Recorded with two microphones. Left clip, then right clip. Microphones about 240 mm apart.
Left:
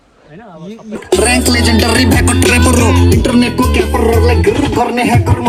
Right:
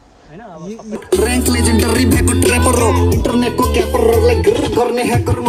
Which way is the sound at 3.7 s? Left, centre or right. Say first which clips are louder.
Even; left.